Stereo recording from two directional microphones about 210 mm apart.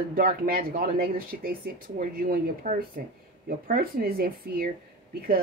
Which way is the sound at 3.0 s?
45° right (ahead or behind).